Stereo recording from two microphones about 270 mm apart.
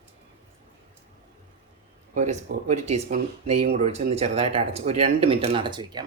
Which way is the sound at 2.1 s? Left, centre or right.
Right.